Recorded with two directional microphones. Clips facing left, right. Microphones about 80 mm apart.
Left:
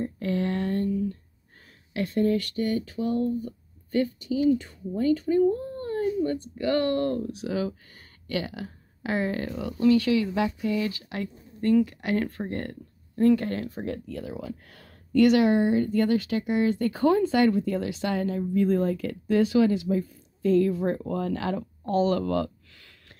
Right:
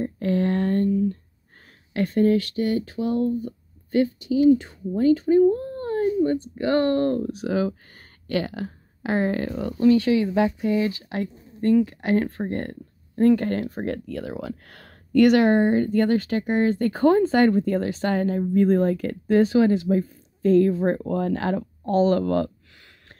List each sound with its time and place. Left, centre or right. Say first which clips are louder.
0.0 s a sound: right 4 dB; right
2.0 s speech: right 5 dB; right
4.2 s speech: right 6 dB; left
4.9 s speech: right 5 dB; right
13.9 s speech: right 4 dB; right
22.8 s a sound: right 3 dB; right